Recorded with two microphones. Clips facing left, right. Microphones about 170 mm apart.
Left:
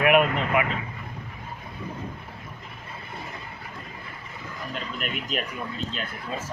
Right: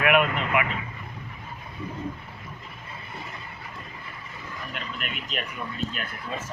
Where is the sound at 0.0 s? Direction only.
35° left (ahead or behind).